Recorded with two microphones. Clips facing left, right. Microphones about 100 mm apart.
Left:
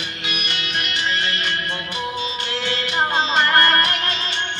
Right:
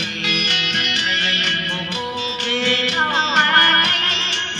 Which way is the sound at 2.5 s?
70° right (ahead or behind).